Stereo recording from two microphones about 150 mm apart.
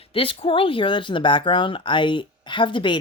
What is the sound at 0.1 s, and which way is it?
Speech, 35° left (ahead or behind).